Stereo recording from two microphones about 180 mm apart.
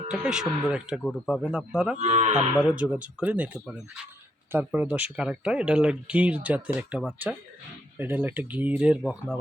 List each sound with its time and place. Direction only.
0.1 s speech: 5° right (ahead or behind)
2.0 s cattle: 40° right (ahead or behind)
2.6 s speech: 5° right (ahead or behind)